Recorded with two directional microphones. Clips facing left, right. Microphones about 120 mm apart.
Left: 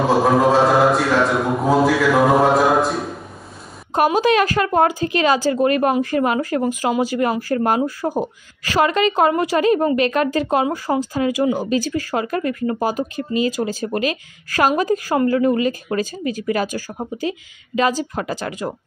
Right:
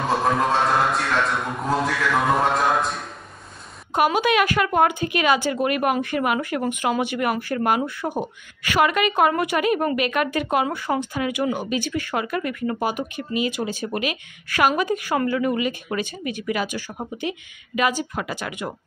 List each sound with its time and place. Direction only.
0.0 s a sound: 5° left (ahead or behind)
3.9 s speech: 35° left (ahead or behind)
18.1 s speech: 35° left (ahead or behind)